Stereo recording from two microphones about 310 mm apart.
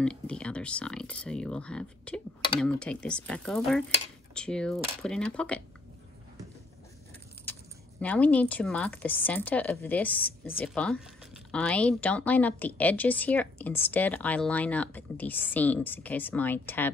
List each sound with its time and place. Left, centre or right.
0.0 s speech: centre
7.5 s keys jangling: centre
8.0 s speech: centre